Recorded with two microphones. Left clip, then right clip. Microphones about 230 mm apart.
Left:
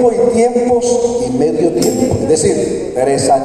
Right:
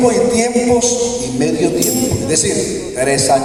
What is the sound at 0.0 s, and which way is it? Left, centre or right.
Speech, right.